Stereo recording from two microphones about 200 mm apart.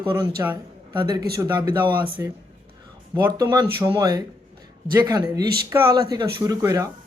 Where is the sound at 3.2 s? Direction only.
20° right (ahead or behind).